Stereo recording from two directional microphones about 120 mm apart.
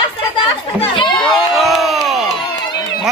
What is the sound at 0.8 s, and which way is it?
Speech, 45° left (ahead or behind).